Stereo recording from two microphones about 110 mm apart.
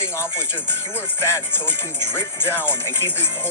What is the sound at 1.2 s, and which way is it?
Speech, 20° left (ahead or behind).